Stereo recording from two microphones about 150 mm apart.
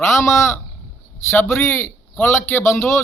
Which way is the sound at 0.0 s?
20° left (ahead or behind).